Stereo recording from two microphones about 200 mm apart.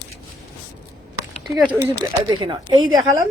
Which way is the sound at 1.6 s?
5° right (ahead or behind).